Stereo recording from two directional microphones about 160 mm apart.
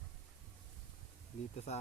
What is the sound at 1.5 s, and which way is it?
Speech, 45° left (ahead or behind).